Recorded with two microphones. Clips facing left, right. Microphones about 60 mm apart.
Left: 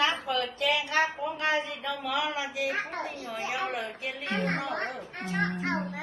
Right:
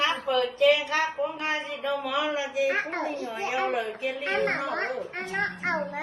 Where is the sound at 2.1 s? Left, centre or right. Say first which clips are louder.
Right 2 dB; right.